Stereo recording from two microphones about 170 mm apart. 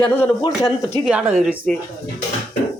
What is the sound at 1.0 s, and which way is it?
Speech, 5° right (ahead or behind).